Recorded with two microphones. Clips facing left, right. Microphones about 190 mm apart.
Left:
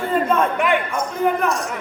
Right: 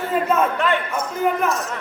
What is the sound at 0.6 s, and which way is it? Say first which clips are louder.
Speech: left 2 dB; 15° left (ahead or behind).